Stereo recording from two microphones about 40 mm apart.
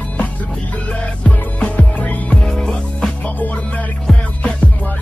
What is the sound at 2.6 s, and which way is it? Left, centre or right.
Music, centre.